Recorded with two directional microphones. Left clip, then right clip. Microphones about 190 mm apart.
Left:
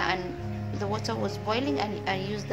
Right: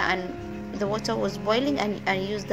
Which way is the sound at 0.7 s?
20° right (ahead or behind).